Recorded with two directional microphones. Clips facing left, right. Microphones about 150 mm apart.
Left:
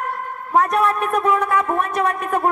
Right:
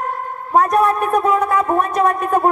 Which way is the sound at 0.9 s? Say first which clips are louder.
Right 3 dB; 35° right (ahead or behind).